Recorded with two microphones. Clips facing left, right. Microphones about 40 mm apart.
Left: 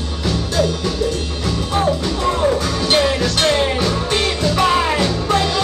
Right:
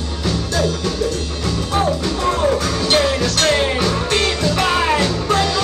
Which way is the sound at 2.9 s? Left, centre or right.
Centre.